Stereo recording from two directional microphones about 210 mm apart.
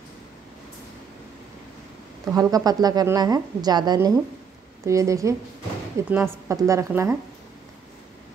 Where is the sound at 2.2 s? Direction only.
15° right (ahead or behind).